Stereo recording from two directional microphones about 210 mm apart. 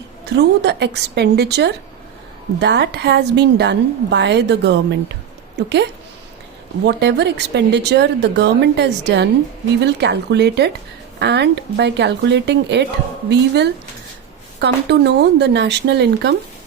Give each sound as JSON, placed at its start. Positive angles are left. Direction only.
{"t": 0.3, "sound": "a woman's voice", "side_deg": -55}
{"t": 14.6, "sound": "a woman's voice", "side_deg": -55}